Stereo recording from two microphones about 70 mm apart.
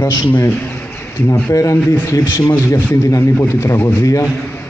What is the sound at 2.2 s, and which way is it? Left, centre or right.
Speech, left.